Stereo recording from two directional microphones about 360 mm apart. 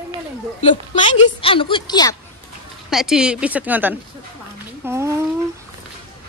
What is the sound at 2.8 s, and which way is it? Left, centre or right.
A woman's voice, centre.